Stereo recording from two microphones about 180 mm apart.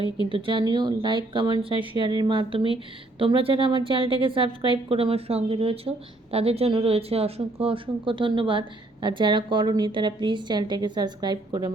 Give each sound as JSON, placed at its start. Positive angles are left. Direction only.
{"t": 0.2, "sound": "a woman's voice", "side_deg": -30}